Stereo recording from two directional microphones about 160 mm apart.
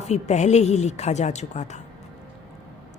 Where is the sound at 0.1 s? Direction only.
45° left (ahead or behind).